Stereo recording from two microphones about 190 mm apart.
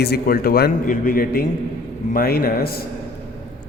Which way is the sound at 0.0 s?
55° left (ahead or behind).